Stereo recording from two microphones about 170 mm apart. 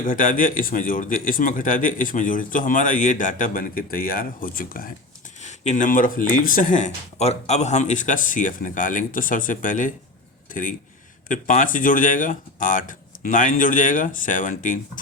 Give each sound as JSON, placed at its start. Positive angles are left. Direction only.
{"t": 0.0, "sound": "speech", "side_deg": 50}
{"t": 5.4, "sound": "speech", "side_deg": 45}